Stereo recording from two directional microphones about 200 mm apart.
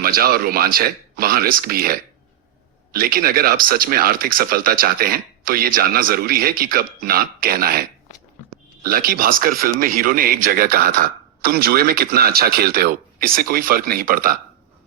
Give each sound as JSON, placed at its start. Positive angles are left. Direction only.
{"t": 0.0, "sound": "speech", "side_deg": -50}